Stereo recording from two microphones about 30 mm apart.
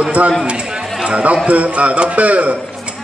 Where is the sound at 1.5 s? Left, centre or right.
Right.